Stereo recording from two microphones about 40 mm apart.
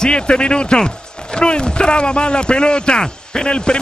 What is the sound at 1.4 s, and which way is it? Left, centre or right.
Speech, left.